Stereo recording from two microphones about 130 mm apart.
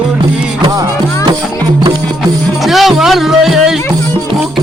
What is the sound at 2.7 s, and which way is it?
Music, centre (ahead or behind).